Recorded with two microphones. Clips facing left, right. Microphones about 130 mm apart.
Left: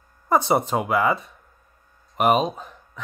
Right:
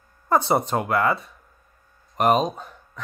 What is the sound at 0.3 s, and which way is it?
Speech, centre (ahead or behind).